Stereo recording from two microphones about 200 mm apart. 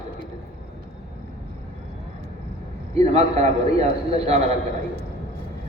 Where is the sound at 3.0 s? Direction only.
30° right (ahead or behind).